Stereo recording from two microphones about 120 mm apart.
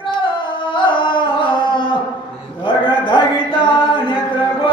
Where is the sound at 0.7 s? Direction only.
45° left (ahead or behind).